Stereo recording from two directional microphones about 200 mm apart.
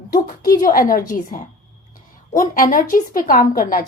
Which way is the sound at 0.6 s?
45° left (ahead or behind).